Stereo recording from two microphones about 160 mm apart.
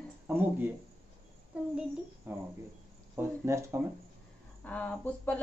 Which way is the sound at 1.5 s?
10° right (ahead or behind).